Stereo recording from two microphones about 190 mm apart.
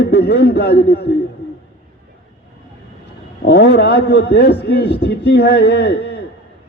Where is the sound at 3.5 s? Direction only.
60° left (ahead or behind).